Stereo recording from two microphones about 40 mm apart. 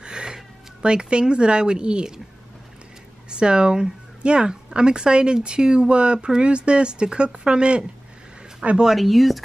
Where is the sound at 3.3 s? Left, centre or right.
Right.